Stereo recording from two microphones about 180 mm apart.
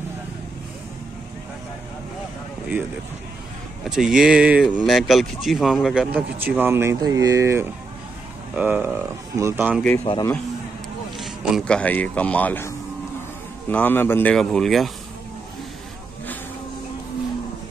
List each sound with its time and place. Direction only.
3.8 s speech: 5° right (ahead or behind)
10.1 s speech: 30° left (ahead or behind)
11.1 s a man's voice: centre (ahead or behind)